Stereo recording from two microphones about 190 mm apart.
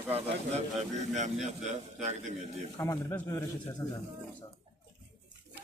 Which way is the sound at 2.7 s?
15° left (ahead or behind).